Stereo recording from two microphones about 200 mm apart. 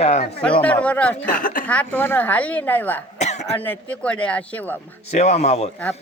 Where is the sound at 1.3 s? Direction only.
40° left (ahead or behind).